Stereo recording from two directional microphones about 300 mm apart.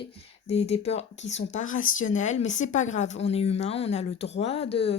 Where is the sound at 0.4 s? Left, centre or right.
Left.